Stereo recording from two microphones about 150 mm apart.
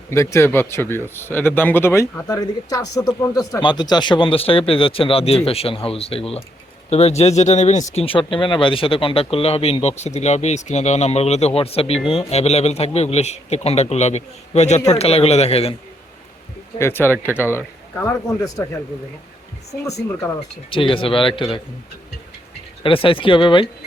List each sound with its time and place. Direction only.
0.1 s speech: 20° left (ahead or behind); by 8.0 s 50° left (ahead or behind)
8.0 s speech: 35° left (ahead or behind)
16.7 s speech: 15° left (ahead or behind)
20.7 s speech: 35° left (ahead or behind)
22.8 s speech: 35° left (ahead or behind)